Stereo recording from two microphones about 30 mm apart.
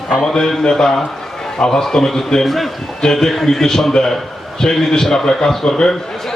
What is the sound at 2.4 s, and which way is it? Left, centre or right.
Speech, centre.